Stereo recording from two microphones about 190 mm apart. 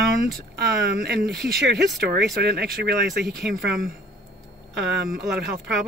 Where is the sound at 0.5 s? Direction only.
60° right (ahead or behind).